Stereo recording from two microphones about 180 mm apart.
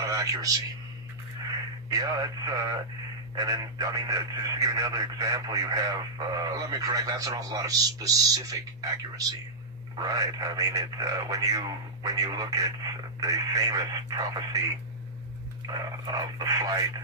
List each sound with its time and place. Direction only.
0.0 s a man's voice: 20° right (ahead or behind)
1.9 s speech: 20° right (ahead or behind)